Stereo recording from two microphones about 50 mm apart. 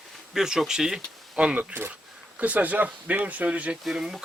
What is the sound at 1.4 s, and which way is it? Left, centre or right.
Speech, right.